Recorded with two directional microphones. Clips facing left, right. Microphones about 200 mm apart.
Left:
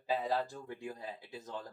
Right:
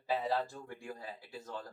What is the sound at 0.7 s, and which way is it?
Speech, 20° left (ahead or behind).